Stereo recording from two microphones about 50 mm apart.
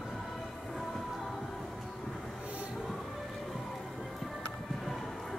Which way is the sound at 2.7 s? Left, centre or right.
Centre.